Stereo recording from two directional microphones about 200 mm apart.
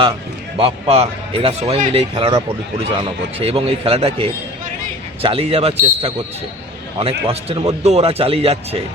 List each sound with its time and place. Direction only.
0.5 s speech: 30° right (ahead or behind)
7.0 s speech: 30° right (ahead or behind)